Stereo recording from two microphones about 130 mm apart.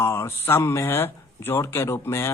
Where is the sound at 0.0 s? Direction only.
20° left (ahead or behind).